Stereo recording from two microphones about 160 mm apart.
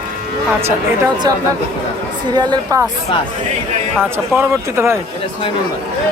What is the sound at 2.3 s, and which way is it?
Speech, 25° right (ahead or behind).